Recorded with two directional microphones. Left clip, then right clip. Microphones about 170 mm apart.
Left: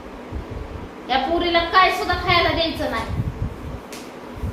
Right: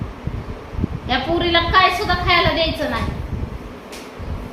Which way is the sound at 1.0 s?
40° right (ahead or behind).